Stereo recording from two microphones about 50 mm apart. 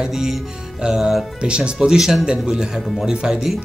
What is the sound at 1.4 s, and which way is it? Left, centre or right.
Speech, centre.